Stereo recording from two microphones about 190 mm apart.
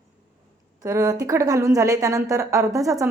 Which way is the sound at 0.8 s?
15° right (ahead or behind).